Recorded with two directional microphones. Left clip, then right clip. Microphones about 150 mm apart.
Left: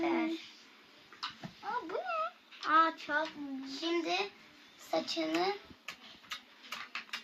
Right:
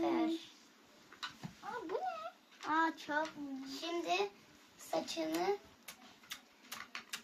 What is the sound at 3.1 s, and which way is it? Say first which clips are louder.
Speech: left 3 dB; 30° right (ahead or behind).